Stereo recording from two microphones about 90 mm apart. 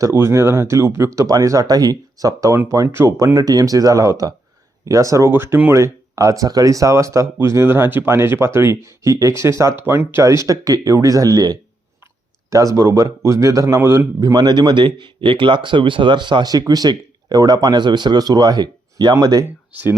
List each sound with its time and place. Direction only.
0.0 s speech: 30° right (ahead or behind)
3.3 s speech: 45° right (ahead or behind); by 14.1 s 25° right (ahead or behind)
14.2 s speech: 50° right (ahead or behind)
19.7 s speech: 15° right (ahead or behind)